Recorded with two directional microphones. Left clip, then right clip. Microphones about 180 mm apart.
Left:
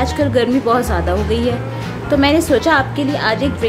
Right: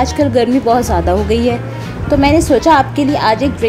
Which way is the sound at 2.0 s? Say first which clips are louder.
Right 3 dB; 15° right (ahead or behind).